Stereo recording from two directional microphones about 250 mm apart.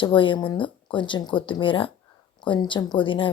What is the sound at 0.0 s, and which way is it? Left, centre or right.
Speech, centre.